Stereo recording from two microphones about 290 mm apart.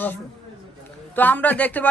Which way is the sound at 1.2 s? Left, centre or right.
Centre.